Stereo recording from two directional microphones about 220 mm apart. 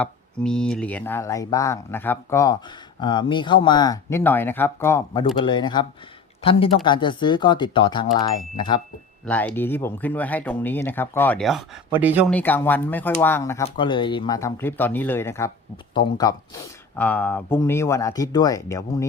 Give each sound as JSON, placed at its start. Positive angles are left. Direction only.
{"t": 0.0, "sound": "speech", "side_deg": 5}
{"t": 9.2, "sound": "speech", "side_deg": 5}
{"t": 12.3, "sound": "speech", "side_deg": 10}